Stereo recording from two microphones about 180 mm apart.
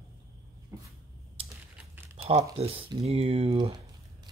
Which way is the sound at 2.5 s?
30° right (ahead or behind).